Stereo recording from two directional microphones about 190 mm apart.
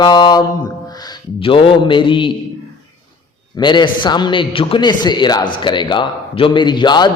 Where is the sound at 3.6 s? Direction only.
25° left (ahead or behind).